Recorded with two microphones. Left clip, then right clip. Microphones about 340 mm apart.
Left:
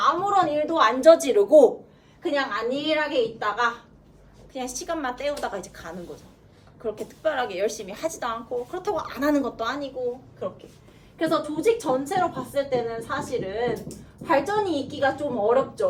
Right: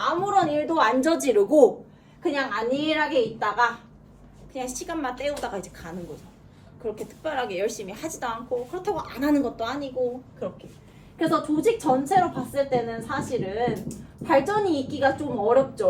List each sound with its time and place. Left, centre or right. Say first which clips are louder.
0.3 s a child's voice: left 1 dB; centre
11.2 s a woman's voice: right 1 dB; centre